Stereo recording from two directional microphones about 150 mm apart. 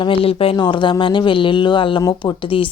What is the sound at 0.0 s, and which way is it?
Speech, 35° left (ahead or behind).